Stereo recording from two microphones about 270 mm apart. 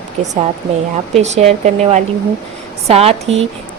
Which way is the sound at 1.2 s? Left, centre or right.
Right.